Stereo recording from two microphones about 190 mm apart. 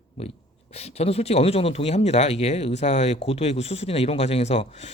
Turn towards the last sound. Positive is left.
turn(degrees=35)  # may be behind; listen again after turning